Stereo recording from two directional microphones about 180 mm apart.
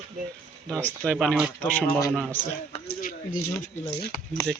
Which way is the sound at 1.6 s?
10° left (ahead or behind).